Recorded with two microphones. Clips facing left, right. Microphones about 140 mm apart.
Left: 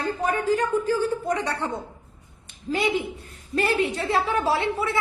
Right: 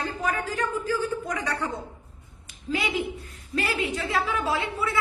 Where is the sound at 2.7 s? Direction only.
35° left (ahead or behind).